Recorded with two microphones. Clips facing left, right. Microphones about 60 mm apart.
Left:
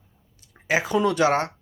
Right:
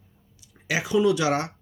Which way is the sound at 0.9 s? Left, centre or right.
Left.